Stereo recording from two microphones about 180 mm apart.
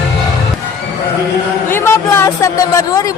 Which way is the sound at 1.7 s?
15° left (ahead or behind).